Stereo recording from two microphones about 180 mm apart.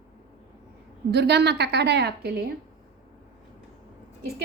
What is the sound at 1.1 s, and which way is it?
Speech, 65° right (ahead or behind).